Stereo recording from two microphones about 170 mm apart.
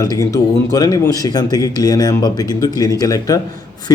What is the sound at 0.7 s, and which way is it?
A man's voice, 20° left (ahead or behind).